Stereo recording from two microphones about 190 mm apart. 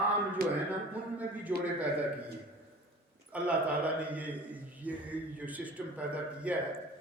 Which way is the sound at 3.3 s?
5° right (ahead or behind).